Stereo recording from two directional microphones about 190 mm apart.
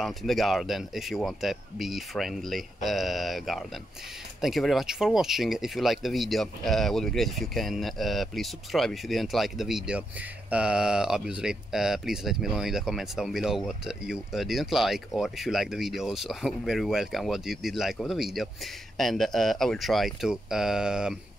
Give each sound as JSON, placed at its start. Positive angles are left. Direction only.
{"t": 0.0, "sound": "speech", "side_deg": 0}